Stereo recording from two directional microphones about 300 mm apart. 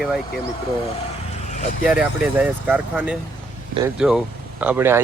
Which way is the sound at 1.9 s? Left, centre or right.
Centre.